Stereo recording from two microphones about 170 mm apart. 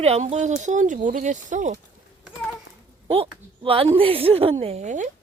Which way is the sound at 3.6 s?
35° right (ahead or behind).